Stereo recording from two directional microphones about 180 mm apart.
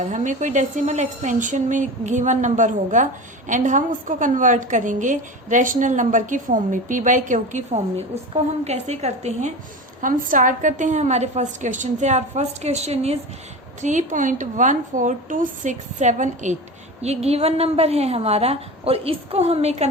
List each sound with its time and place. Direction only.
0.0 s a woman's voice: 45° right (ahead or behind)
10.0 s a woman's voice: 50° right (ahead or behind)